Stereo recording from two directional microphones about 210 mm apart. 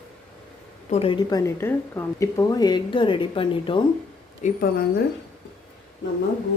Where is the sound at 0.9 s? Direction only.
25° left (ahead or behind).